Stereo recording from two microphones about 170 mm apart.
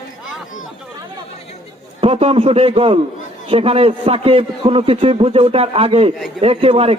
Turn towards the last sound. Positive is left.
turn(degrees=-35)  # may be behind; listen again after turning